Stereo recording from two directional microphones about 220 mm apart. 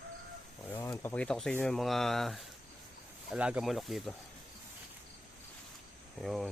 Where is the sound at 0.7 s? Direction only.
10° left (ahead or behind).